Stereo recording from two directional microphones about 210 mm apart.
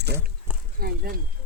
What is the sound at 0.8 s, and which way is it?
Speech, 45° right (ahead or behind).